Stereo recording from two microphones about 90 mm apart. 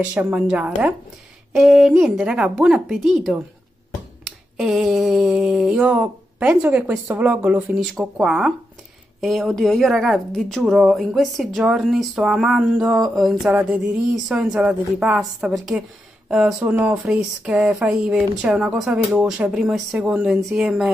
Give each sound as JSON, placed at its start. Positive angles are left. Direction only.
{"t": 0.0, "sound": "speech", "side_deg": -20}
{"t": 4.6, "sound": "speech", "side_deg": -5}
{"t": 5.9, "sound": "speech", "side_deg": -15}
{"t": 7.7, "sound": "speech", "side_deg": -5}
{"t": 13.5, "sound": "speech", "side_deg": -15}
{"t": 13.7, "sound": "speech", "side_deg": -5}
{"t": 16.6, "sound": "speech", "side_deg": -20}